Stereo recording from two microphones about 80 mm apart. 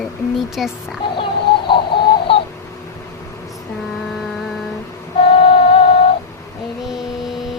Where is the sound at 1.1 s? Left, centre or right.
Left.